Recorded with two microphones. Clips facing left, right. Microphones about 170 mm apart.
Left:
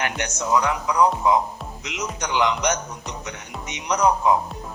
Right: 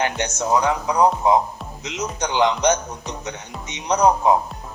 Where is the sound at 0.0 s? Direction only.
30° right (ahead or behind).